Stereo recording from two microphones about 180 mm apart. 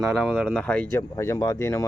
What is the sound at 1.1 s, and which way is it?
Speech, 20° left (ahead or behind).